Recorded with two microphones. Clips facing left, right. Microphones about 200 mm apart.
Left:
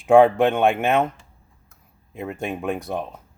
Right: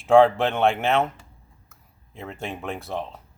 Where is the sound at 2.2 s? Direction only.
15° left (ahead or behind).